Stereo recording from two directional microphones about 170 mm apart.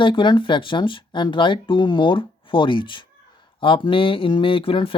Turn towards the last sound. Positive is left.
turn(degrees=30)  # may be behind; listen again after turning